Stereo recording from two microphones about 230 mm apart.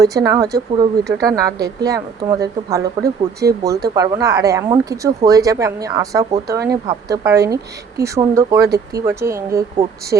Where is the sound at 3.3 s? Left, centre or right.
Right.